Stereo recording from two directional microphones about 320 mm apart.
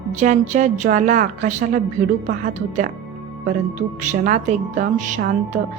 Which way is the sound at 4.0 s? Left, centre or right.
Right.